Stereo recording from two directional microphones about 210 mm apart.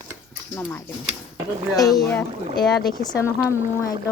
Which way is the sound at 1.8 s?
15° left (ahead or behind).